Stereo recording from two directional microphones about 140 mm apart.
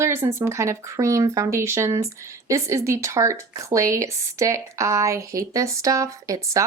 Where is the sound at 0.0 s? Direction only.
20° right (ahead or behind).